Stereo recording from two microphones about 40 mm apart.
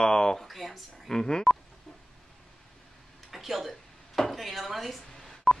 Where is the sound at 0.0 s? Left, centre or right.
Centre.